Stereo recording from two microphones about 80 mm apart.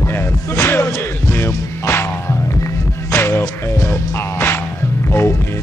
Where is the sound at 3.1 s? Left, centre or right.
Left.